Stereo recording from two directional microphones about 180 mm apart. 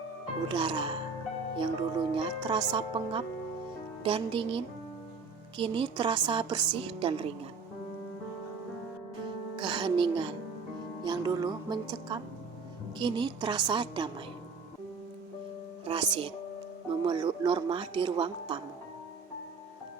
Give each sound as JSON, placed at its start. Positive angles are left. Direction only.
{"t": 0.4, "sound": "speech", "side_deg": -25}
{"t": 9.6, "sound": "music", "side_deg": -25}
{"t": 11.0, "sound": "speech", "side_deg": -25}
{"t": 15.8, "sound": "music", "side_deg": -30}
{"t": 17.0, "sound": "speech", "side_deg": -30}